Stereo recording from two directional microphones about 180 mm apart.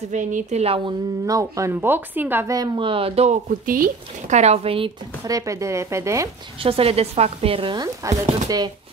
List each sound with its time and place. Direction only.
0.1 s speech: 45° right (ahead or behind)
1.2 s speech: 20° right (ahead or behind)
6.6 s speech: 30° right (ahead or behind)